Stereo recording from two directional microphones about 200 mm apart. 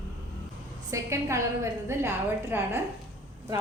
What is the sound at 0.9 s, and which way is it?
A woman's voice, 15° right (ahead or behind).